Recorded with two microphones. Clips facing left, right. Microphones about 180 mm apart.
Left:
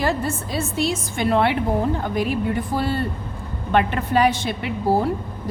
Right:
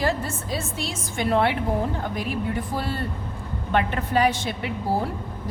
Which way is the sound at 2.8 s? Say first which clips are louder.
Left 5 dB; 70° left (ahead or behind).